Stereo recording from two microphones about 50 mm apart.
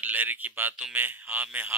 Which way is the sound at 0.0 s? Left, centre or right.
Right.